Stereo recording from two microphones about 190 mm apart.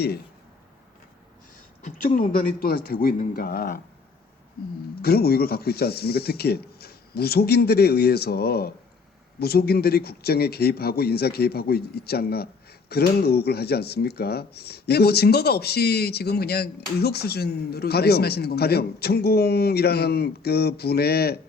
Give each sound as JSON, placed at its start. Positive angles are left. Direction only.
{"t": 2.1, "sound": "speech", "side_deg": 50}
{"t": 5.0, "sound": "speech", "side_deg": 55}